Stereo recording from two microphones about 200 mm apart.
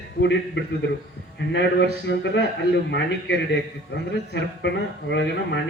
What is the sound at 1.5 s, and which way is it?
A man's voice, 60° left (ahead or behind).